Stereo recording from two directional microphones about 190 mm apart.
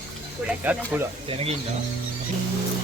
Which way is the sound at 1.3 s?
30° right (ahead or behind).